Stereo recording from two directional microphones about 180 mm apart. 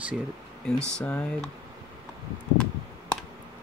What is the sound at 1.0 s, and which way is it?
Speech, 5° left (ahead or behind).